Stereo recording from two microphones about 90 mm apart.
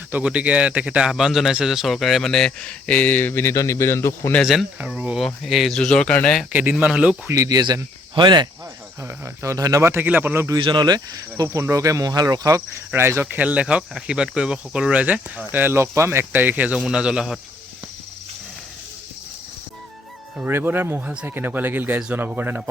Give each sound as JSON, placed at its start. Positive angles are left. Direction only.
{"t": 0.1, "sound": "speech", "side_deg": -15}
{"t": 4.4, "sound": "speech", "side_deg": -5}
{"t": 5.2, "sound": "speech", "side_deg": 0}
{"t": 6.5, "sound": "speech", "side_deg": -20}
{"t": 7.3, "sound": "speech", "side_deg": -35}
{"t": 8.1, "sound": "speech", "side_deg": -60}
{"t": 9.2, "sound": "speech", "side_deg": -35}
{"t": 9.9, "sound": "speech", "side_deg": -20}
{"t": 10.6, "sound": "speech", "side_deg": -60}
{"t": 11.4, "sound": "speech", "side_deg": -30}
{"t": 13.0, "sound": "speech", "side_deg": -30}
{"t": 13.2, "sound": "speech", "side_deg": -15}
{"t": 20.4, "sound": "speech", "side_deg": -25}